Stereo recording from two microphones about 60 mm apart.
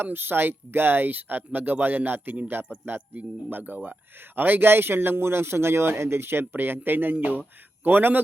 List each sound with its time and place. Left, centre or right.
0.0 s speech: right